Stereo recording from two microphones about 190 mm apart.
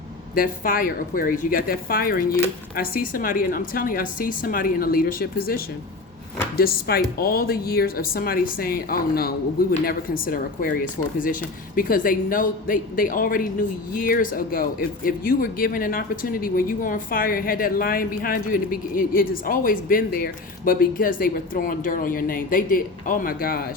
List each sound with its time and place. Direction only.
0.3 s speech: 45° left (ahead or behind)